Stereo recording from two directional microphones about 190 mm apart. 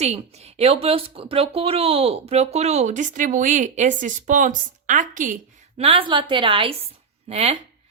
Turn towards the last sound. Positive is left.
turn(degrees=-35)  # may be behind; listen again after turning